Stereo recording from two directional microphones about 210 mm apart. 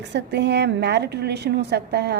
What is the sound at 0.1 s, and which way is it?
A woman's voice, 55° right (ahead or behind).